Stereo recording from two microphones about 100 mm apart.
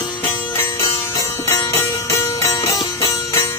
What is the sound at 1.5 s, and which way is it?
Music, 30° left (ahead or behind).